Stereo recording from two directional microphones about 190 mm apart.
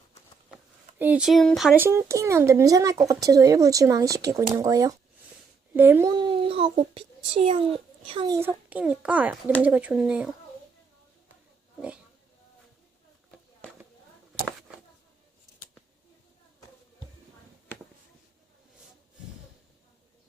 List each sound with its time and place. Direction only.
0.9 s a child's voice: 10° right (ahead or behind); by 8.4 s 25° right (ahead or behind)
8.4 s speech: 10° right (ahead or behind)